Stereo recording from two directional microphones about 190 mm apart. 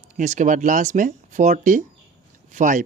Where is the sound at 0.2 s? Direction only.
40° right (ahead or behind).